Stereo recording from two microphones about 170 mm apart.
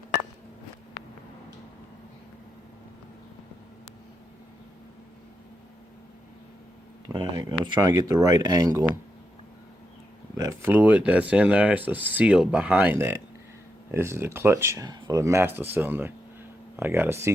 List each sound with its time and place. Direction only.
7.1 s speech: 25° right (ahead or behind)
10.3 s speech: 20° right (ahead or behind)